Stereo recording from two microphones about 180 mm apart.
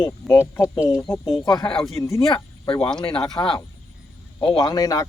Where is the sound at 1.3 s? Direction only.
25° left (ahead or behind).